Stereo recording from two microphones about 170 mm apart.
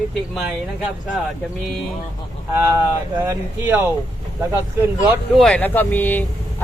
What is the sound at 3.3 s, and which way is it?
Speech, 10° right (ahead or behind).